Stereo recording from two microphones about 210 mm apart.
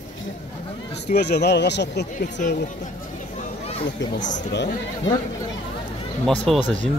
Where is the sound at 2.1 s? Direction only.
35° left (ahead or behind).